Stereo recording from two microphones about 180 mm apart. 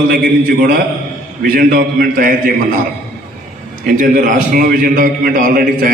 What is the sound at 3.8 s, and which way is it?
A man's voice, 50° right (ahead or behind).